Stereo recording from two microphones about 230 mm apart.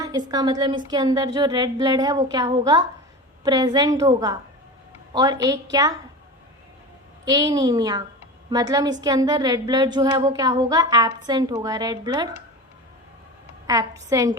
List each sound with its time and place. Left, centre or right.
0.0 s a woman's voice: centre
7.3 s a woman's voice: centre
13.7 s a woman's voice: centre